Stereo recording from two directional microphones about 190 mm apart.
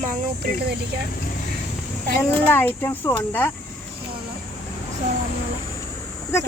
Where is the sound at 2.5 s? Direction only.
10° left (ahead or behind).